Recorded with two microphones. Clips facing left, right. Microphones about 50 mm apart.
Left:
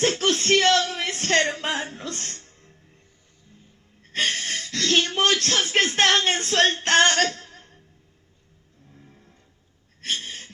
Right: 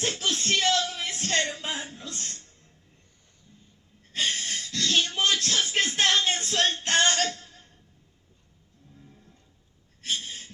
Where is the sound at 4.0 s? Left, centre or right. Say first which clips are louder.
Left 4 dB; left.